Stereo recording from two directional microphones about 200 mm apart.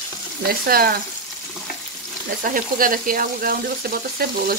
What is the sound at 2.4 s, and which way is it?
Speech, 45° right (ahead or behind).